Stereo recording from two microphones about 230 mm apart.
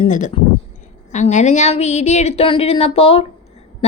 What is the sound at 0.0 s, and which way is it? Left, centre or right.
A woman's voice, left.